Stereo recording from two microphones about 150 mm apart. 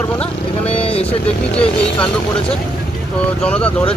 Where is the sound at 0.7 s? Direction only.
40° left (ahead or behind).